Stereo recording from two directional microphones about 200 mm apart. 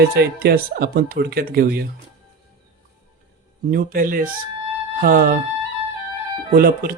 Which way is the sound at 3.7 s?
45° right (ahead or behind).